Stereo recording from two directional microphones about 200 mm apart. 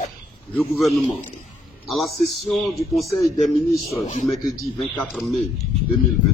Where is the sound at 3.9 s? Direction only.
40° left (ahead or behind).